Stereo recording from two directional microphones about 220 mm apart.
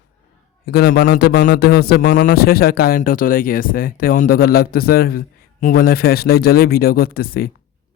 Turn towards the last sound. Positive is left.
turn(degrees=45)  # may be behind; listen again after turning